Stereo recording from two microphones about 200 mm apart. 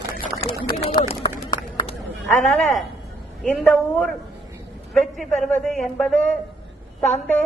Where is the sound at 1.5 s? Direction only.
25° left (ahead or behind).